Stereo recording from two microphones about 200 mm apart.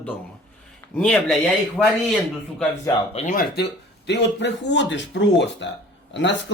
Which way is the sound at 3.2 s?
40° left (ahead or behind).